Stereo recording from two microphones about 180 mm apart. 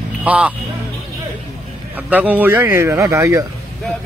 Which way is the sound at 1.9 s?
10° right (ahead or behind).